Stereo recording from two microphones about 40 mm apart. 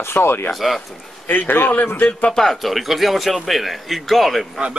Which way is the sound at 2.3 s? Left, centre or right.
Centre.